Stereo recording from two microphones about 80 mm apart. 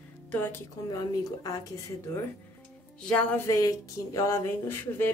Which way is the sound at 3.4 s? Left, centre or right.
Left.